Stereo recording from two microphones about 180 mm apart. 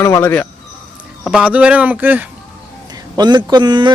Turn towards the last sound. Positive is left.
turn(degrees=-25)  # may be behind; listen again after turning